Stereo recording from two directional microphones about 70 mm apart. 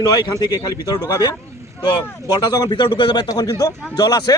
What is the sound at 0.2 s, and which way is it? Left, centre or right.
Speech, left.